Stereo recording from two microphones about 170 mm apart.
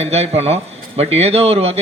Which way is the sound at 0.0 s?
40° right (ahead or behind).